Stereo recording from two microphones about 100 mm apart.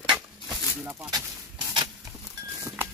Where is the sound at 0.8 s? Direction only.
20° right (ahead or behind).